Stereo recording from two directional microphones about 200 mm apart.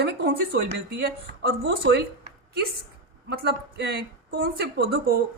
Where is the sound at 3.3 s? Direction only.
55° right (ahead or behind).